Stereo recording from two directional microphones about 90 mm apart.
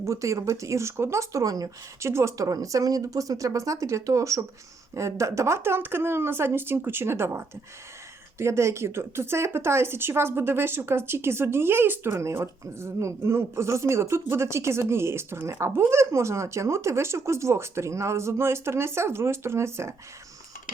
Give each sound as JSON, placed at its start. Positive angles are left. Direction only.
{"t": 0.0, "sound": "speech", "side_deg": -35}
{"t": 2.0, "sound": "speech", "side_deg": -30}